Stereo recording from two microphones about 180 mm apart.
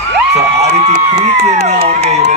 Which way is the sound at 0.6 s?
40° right (ahead or behind).